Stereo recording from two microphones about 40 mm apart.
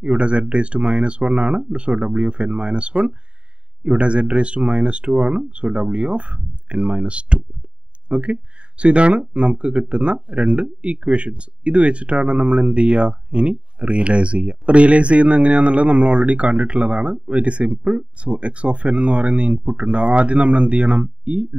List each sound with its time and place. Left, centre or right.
0.0 s speech: right